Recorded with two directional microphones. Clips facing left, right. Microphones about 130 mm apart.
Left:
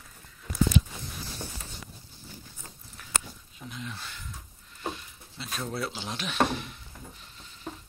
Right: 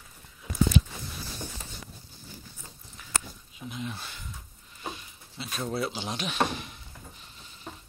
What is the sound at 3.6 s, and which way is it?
Speech, 15° right (ahead or behind).